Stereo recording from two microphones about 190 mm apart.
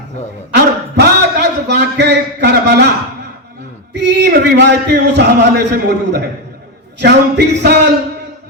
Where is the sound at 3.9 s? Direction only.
65° right (ahead or behind).